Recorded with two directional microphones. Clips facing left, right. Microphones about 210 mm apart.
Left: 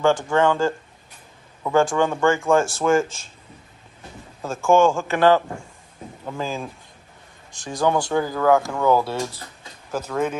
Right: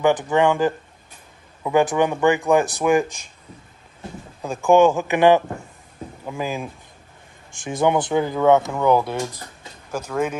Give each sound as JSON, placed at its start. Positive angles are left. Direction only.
{"t": 0.0, "sound": "speech", "side_deg": -20}
{"t": 4.4, "sound": "speech", "side_deg": -15}